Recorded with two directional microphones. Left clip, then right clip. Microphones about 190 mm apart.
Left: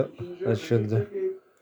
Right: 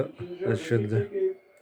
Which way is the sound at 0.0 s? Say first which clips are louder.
Left 2 dB; 10° left (ahead or behind).